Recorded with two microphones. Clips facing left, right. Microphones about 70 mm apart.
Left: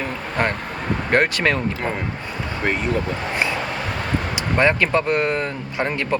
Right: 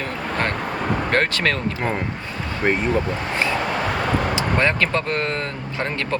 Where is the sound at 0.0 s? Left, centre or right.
Centre.